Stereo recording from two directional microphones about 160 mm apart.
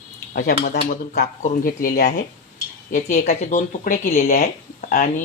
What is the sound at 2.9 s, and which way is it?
Speech, 50° left (ahead or behind).